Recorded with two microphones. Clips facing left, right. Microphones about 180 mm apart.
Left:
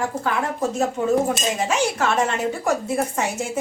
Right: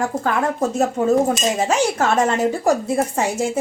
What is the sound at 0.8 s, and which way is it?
Speech, 40° right (ahead or behind).